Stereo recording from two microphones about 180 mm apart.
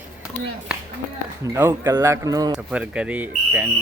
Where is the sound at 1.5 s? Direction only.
15° right (ahead or behind).